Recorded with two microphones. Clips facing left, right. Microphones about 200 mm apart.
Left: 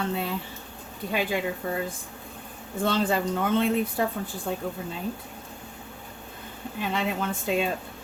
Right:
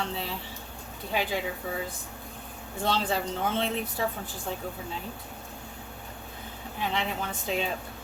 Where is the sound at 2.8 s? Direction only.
55° left (ahead or behind).